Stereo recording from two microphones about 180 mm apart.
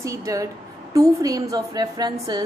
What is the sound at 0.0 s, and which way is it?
A woman's voice, 20° right (ahead or behind).